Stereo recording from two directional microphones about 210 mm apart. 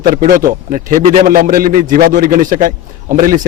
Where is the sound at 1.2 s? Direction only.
40° right (ahead or behind).